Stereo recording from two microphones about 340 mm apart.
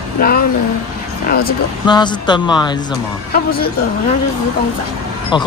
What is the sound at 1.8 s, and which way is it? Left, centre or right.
Speech, centre.